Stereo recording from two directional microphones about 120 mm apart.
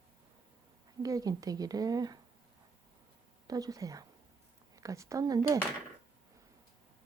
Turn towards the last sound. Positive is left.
turn(degrees=-25)  # may be behind; listen again after turning